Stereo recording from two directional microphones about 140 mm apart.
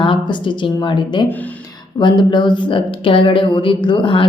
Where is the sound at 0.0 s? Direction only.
35° left (ahead or behind).